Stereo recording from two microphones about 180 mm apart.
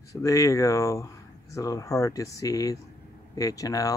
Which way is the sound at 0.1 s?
20° left (ahead or behind).